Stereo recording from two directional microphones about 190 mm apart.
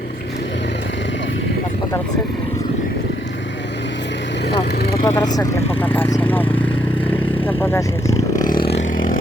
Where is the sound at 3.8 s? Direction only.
65° left (ahead or behind).